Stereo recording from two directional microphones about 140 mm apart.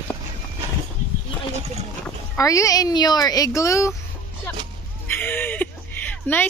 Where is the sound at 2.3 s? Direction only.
25° left (ahead or behind).